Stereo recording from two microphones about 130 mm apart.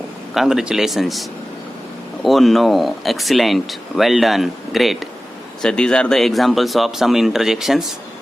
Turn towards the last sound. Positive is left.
turn(degrees=-5)  # may be behind; listen again after turning